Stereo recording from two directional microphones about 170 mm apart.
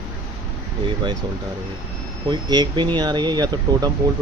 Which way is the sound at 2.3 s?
25° right (ahead or behind).